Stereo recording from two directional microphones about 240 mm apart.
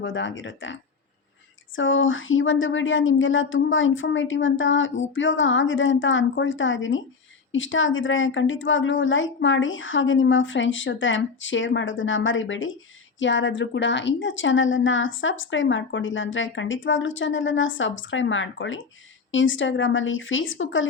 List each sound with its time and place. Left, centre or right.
0.0 s a woman's voice: left